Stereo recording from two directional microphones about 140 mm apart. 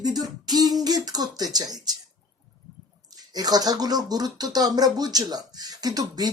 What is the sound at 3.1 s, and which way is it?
Speech, 30° right (ahead or behind).